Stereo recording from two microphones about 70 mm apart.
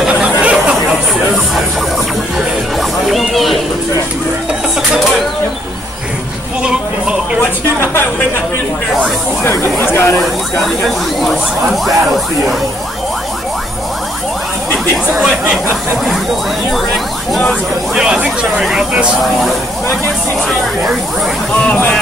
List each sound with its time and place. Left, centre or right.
0.1 s chatter: centre
2.3 s music: centre
6.6 s music: centre
7.8 s a sound: left
9.4 s chatter: left
9.9 s speech: left
11.1 s speech: centre
15.2 s speech: centre
17.9 s speech: centre
18.6 s speech: centre